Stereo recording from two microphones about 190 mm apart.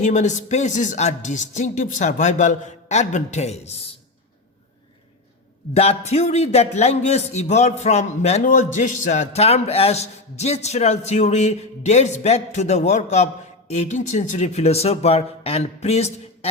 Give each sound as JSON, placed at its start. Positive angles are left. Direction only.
{"t": 0.0, "sound": "a man's voice", "side_deg": 40}
{"t": 5.7, "sound": "a man's voice", "side_deg": 30}